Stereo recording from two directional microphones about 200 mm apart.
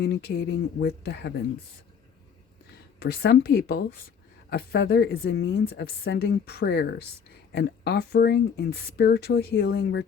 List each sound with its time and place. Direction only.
0.0 s speech: 55° left (ahead or behind)
3.0 s speech: 55° left (ahead or behind)